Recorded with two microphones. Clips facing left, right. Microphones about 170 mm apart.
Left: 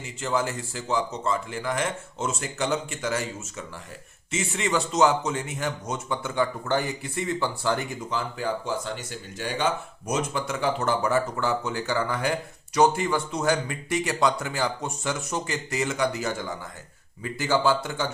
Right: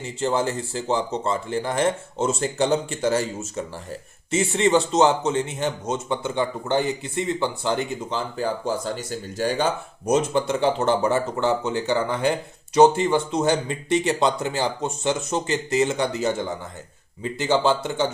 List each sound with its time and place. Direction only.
0.0 s speech: 30° right (ahead or behind)
8.4 s speech: 35° right (ahead or behind)